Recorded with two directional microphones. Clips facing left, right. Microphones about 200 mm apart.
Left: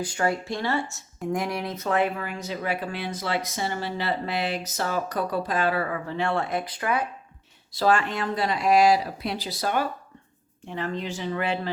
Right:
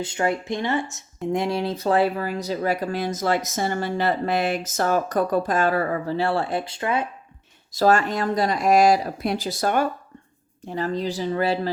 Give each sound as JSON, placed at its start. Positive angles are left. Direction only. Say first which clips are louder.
{"t": 0.0, "sound": "speech", "louder": "right 2 dB", "side_deg": -20}
{"t": 7.7, "sound": "speech", "louder": "right 4 dB", "side_deg": -45}
{"t": 10.6, "sound": "speech", "louder": "right 5 dB", "side_deg": -40}